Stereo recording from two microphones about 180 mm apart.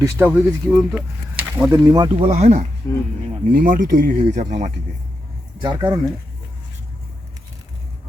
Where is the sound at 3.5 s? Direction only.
50° right (ahead or behind).